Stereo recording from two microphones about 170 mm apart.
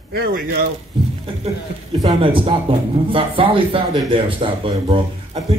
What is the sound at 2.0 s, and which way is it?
Speech, 35° right (ahead or behind).